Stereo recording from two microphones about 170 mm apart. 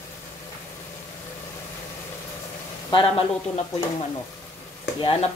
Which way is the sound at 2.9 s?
25° left (ahead or behind).